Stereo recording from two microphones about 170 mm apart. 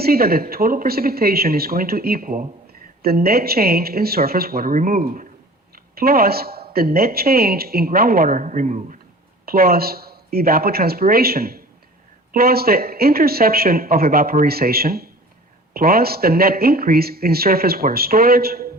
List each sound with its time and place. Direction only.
0.0 s speech: 65° right (ahead or behind)
5.7 s a sound: 60° right (ahead or behind)
6.7 s speech: 65° right (ahead or behind)
9.5 s speech: 60° right (ahead or behind)